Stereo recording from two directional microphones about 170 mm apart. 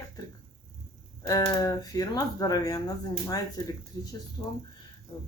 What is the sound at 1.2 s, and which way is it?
Speech, 20° left (ahead or behind).